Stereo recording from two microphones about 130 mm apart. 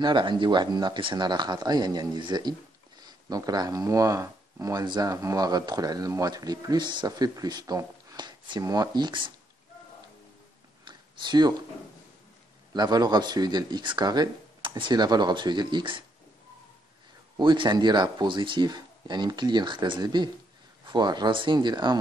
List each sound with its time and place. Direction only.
0.0 s speech: 40° right (ahead or behind)
10.9 s a sound: 35° right (ahead or behind)
12.7 s speech: 30° right (ahead or behind)
17.4 s speech: 40° right (ahead or behind)